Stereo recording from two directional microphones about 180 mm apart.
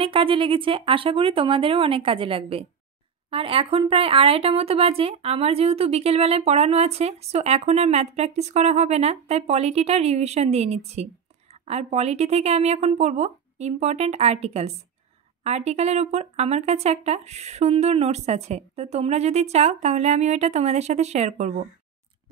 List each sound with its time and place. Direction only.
0.0 s a woman's voice: 30° right (ahead or behind)